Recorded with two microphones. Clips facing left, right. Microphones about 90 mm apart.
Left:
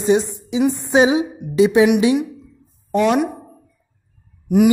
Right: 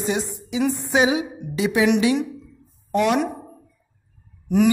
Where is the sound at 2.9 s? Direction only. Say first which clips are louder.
Left 3 dB; 20° left (ahead or behind).